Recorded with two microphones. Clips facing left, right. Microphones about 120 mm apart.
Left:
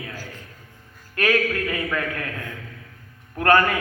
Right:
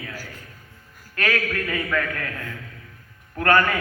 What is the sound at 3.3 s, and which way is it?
Speech, 25° left (ahead or behind).